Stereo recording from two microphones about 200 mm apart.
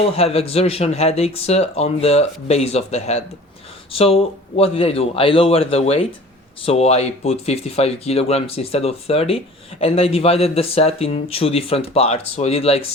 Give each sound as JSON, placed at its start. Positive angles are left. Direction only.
{"t": 0.1, "sound": "speech", "side_deg": 30}